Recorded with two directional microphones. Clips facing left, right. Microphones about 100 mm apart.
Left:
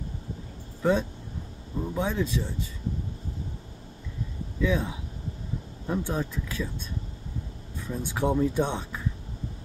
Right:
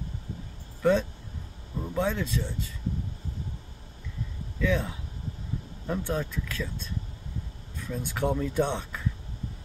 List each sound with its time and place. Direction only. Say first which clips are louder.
0.8 s speech: right 1 dB; 20° left (ahead or behind)
4.6 s speech: left 1 dB; 15° left (ahead or behind)
7.9 s speech: left 2 dB; 20° left (ahead or behind)